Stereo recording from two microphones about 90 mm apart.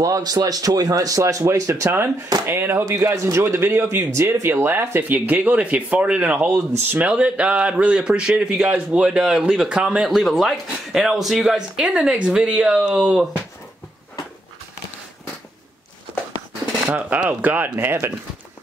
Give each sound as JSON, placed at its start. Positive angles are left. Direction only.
{"t": 0.0, "sound": "a man's voice", "side_deg": -45}
{"t": 16.8, "sound": "a man's voice", "side_deg": -10}